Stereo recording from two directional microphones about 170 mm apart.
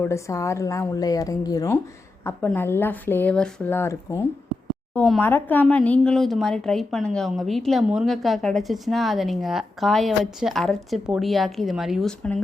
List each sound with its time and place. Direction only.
0.0 s a woman's voice: 15° left (ahead or behind)